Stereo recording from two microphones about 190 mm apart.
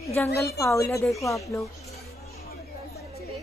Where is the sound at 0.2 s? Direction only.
10° left (ahead or behind).